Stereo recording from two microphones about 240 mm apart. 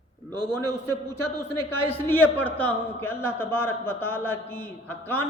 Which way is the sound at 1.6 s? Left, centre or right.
Centre.